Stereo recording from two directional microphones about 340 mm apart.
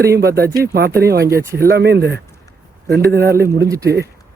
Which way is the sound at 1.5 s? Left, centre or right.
Right.